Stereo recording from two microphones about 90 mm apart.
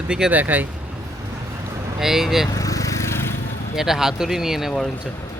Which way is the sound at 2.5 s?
40° left (ahead or behind).